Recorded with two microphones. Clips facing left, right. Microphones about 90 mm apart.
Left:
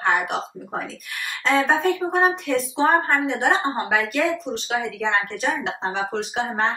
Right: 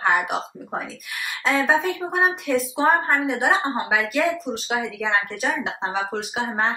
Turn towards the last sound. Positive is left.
turn(degrees=0)  # may be behind; listen again after turning